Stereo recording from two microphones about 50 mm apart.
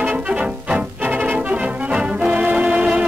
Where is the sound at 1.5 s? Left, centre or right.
Right.